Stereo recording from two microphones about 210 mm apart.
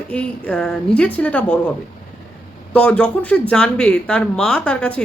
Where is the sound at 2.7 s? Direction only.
5° left (ahead or behind).